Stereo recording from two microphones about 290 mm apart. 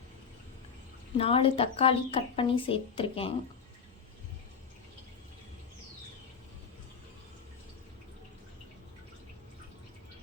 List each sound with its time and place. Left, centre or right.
1.2 s speech: centre